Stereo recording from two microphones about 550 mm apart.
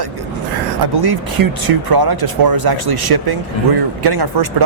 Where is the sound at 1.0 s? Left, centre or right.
Right.